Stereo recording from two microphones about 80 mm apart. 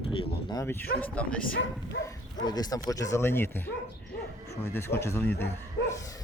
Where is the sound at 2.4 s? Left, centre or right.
Left.